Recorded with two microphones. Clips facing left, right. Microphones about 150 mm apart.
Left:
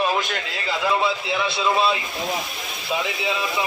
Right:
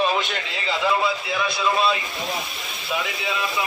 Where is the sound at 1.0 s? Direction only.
25° left (ahead or behind).